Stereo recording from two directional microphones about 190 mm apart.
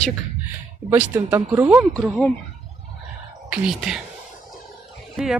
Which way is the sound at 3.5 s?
5° right (ahead or behind).